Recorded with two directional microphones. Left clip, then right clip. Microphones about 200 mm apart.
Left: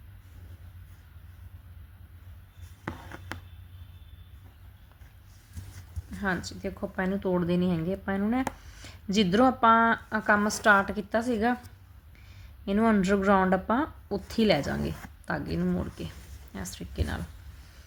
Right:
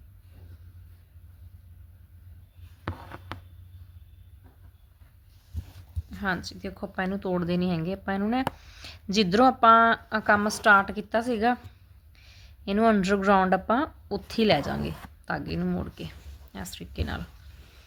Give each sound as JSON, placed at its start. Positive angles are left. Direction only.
{"t": 2.8, "sound": "writing", "side_deg": 10}
{"t": 6.1, "sound": "a woman's voice", "side_deg": -15}
{"t": 12.6, "sound": "a woman's voice", "side_deg": -15}